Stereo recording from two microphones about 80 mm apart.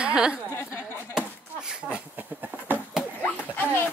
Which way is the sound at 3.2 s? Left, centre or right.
Left.